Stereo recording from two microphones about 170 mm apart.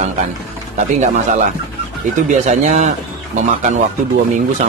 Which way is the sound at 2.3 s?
40° right (ahead or behind).